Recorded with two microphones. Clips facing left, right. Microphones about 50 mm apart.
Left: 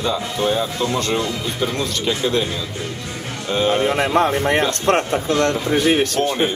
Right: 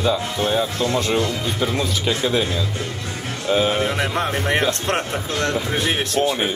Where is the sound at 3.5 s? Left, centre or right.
Centre.